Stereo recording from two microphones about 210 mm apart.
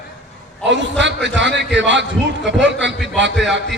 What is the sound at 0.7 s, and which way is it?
A man's voice, 60° right (ahead or behind).